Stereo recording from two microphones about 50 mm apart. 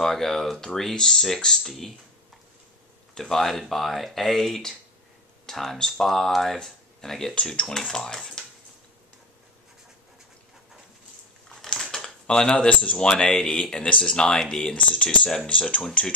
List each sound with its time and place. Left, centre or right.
0.0 s speech: centre
3.2 s speech: centre
11.4 s crushing: centre
11.8 s a sound: centre
12.9 s speech: centre